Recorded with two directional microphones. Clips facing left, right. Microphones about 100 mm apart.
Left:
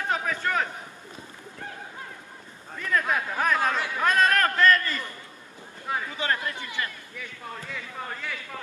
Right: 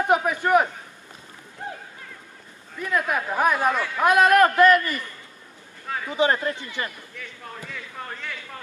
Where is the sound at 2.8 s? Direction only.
10° right (ahead or behind).